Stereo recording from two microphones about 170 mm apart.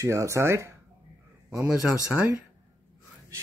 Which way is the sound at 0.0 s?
15° right (ahead or behind).